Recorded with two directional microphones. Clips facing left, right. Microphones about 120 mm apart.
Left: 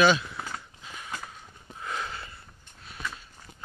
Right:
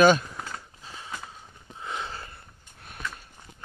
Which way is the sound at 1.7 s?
25° right (ahead or behind).